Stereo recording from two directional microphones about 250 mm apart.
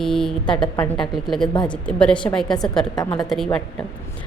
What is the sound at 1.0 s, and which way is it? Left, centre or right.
A woman's voice, centre.